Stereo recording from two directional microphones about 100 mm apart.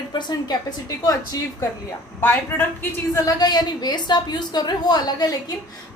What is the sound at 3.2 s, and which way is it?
A woman's voice, 40° left (ahead or behind).